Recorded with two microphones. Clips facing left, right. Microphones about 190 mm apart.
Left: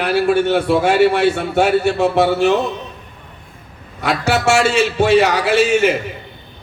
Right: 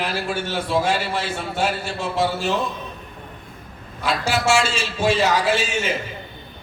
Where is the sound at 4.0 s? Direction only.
65° left (ahead or behind).